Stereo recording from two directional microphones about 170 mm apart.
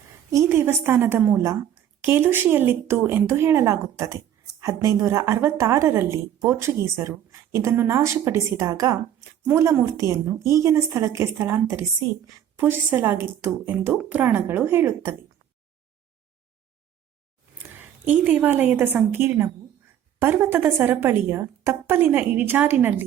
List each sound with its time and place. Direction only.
0.3 s a woman's voice: 15° right (ahead or behind)
17.6 s a woman's voice: 10° right (ahead or behind)